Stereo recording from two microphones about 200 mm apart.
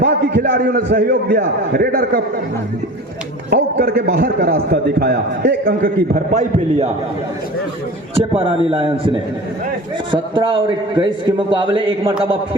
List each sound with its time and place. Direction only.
0.0 s a man's voice: 55° right (ahead or behind)
3.5 s a man's voice: 50° right (ahead or behind)
8.1 s a man's voice: 25° right (ahead or behind)